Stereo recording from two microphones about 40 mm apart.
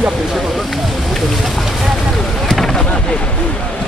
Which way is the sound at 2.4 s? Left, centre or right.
Centre.